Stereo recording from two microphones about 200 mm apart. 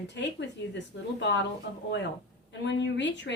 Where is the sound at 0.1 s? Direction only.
60° left (ahead or behind).